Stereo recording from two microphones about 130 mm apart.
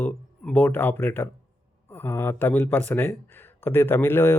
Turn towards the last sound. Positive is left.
turn(degrees=15)  # may be behind; listen again after turning